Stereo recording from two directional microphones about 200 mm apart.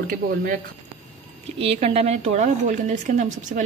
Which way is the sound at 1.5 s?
30° right (ahead or behind).